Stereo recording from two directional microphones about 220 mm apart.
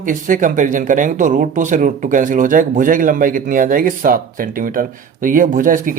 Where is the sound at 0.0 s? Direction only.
35° right (ahead or behind).